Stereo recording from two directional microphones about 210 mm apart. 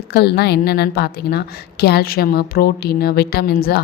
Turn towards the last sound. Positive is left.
turn(degrees=45)  # may be behind; listen again after turning